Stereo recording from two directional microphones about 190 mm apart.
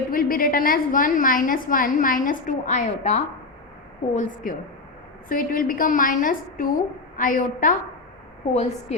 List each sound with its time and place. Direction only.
0.1 s a woman's voice: 50° left (ahead or behind)